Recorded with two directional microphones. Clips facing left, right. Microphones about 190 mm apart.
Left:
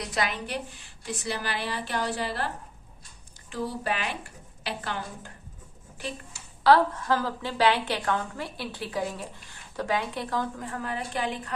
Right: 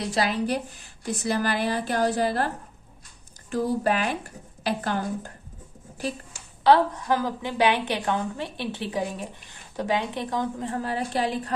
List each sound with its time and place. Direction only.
0.0 s a woman's voice: 30° right (ahead or behind)
3.5 s a woman's voice: 45° right (ahead or behind)
6.7 s a woman's voice: 15° right (ahead or behind); by 11.5 s 35° right (ahead or behind)